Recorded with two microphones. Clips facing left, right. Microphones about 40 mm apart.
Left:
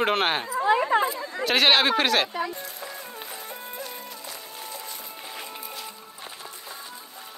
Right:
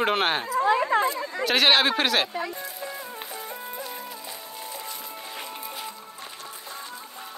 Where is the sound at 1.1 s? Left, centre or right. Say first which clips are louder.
Right 2 dB; right.